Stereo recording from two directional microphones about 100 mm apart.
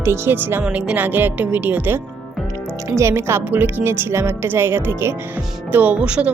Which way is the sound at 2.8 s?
30° right (ahead or behind).